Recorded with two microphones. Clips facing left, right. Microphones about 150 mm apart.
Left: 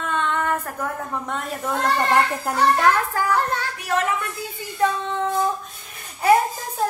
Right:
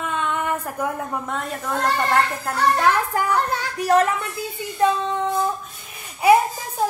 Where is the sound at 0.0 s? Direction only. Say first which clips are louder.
Left 1 dB; 10° right (ahead or behind).